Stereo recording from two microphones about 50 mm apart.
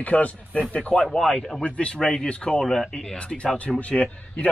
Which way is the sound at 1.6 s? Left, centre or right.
Left.